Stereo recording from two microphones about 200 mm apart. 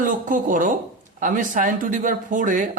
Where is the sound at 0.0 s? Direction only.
40° right (ahead or behind).